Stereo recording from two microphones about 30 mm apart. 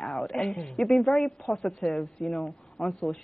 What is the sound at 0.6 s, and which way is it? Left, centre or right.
A woman's voice, left.